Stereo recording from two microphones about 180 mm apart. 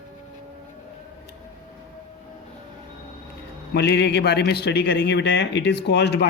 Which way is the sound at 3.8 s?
70° left (ahead or behind).